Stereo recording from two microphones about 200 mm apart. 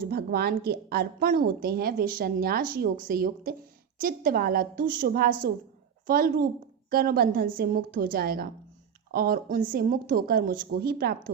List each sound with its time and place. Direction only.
0.0 s a woman's voice: 50° right (ahead or behind)